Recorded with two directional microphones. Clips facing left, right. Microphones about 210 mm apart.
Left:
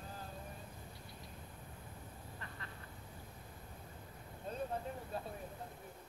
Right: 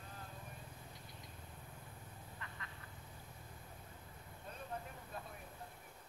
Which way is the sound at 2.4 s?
35° left (ahead or behind).